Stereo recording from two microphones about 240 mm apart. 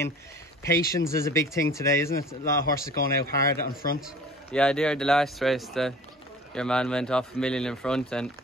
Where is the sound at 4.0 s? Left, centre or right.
Centre.